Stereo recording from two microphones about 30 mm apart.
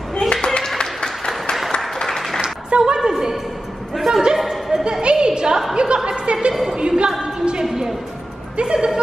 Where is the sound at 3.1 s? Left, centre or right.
Centre.